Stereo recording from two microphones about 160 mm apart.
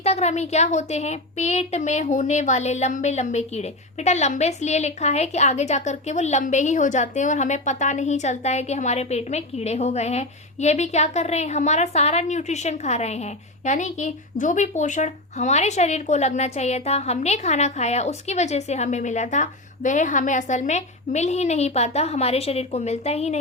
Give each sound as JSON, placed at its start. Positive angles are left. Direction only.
{"t": 0.0, "sound": "a woman's voice", "side_deg": 45}